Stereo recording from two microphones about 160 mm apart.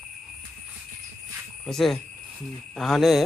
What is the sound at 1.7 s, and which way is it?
Speech, centre (ahead or behind).